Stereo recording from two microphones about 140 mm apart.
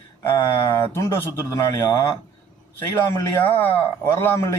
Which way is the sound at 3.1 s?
15° left (ahead or behind).